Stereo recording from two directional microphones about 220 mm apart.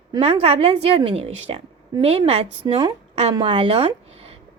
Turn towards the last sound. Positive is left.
turn(degrees=-25)  # may be behind; listen again after turning